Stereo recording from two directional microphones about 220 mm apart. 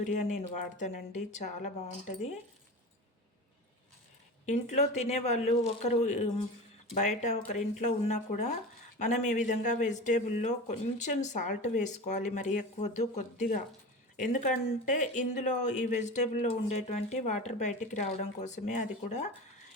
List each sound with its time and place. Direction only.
0.0 s speech: 35° left (ahead or behind)
4.4 s speech: 30° left (ahead or behind)